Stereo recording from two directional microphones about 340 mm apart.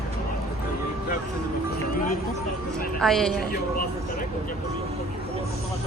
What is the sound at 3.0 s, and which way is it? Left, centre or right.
Speech, centre.